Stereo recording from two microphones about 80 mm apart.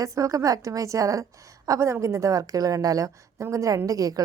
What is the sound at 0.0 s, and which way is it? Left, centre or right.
A woman's voice, right.